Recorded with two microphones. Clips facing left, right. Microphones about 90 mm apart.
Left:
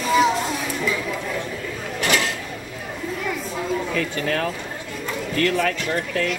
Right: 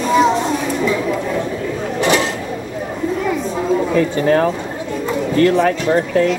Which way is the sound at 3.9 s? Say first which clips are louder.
Right 10 dB; 25° right (ahead or behind).